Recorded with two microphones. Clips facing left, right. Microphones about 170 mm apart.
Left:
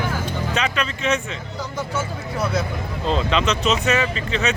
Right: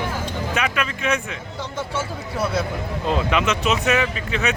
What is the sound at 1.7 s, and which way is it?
Speech, 30° right (ahead or behind).